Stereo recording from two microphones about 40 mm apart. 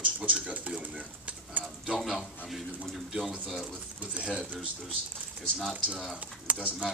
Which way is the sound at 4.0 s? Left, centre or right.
Right.